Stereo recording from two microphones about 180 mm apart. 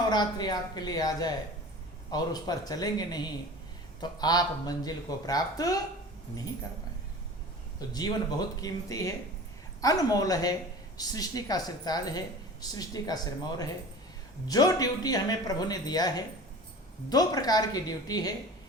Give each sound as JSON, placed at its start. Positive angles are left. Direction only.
{"t": 0.1, "sound": "speech", "side_deg": 25}
{"t": 7.8, "sound": "speech", "side_deg": 20}